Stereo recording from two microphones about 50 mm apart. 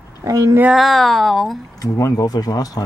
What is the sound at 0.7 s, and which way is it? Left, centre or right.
Speech, centre.